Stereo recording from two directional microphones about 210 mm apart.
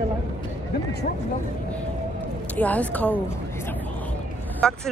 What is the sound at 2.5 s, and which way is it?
Speech, 5° left (ahead or behind).